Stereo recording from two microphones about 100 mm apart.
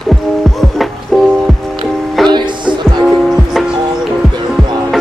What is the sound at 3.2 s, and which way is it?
Music, centre (ahead or behind).